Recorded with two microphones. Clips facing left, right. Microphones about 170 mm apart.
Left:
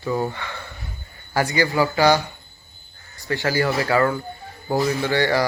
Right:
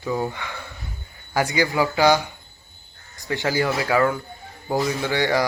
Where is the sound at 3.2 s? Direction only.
20° right (ahead or behind).